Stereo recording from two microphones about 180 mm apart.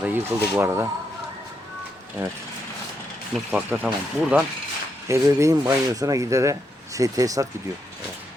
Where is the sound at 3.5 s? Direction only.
10° right (ahead or behind).